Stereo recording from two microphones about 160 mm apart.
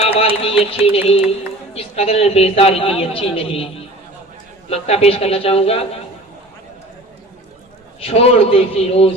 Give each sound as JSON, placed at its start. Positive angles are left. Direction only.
{"t": 0.0, "sound": "a woman's voice", "side_deg": 35}
{"t": 4.7, "sound": "a woman's voice", "side_deg": 40}
{"t": 8.0, "sound": "a woman's voice", "side_deg": 40}